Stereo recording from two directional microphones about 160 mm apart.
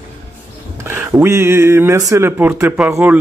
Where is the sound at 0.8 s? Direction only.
15° right (ahead or behind).